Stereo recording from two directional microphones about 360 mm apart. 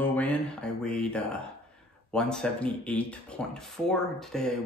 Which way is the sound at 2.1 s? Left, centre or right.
Centre.